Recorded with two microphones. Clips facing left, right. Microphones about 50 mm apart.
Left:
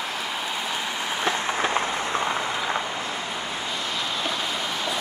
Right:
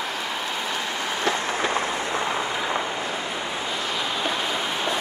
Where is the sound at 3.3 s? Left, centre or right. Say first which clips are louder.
Right 2 dB; centre.